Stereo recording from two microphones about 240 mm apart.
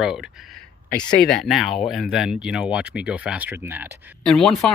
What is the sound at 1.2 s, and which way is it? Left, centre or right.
Speech, centre.